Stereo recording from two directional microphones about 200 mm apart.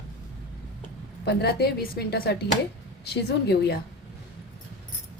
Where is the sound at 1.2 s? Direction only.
55° left (ahead or behind).